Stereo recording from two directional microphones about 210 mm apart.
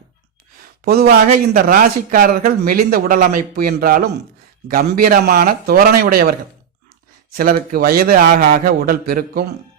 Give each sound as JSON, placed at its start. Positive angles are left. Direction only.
{"t": 0.9, "sound": "a man's voice", "side_deg": -45}
{"t": 7.3, "sound": "a man's voice", "side_deg": -45}